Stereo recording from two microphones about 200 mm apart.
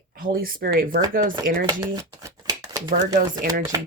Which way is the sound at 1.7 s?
15° right (ahead or behind).